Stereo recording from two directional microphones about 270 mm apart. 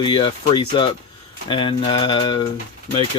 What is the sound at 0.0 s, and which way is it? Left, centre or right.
Speech, centre.